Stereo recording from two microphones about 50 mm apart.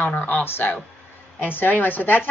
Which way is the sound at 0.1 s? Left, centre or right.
Left.